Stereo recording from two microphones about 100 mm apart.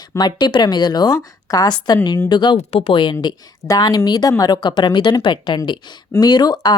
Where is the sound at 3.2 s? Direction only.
40° left (ahead or behind).